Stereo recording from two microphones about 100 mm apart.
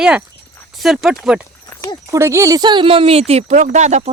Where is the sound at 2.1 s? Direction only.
25° right (ahead or behind).